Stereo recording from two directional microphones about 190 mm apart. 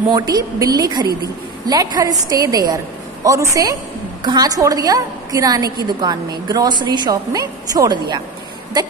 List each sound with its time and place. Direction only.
0.1 s a woman's voice: 20° right (ahead or behind)